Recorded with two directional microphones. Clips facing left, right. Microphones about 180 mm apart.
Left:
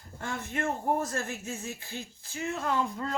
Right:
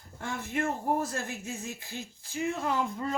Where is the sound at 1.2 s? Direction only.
15° right (ahead or behind).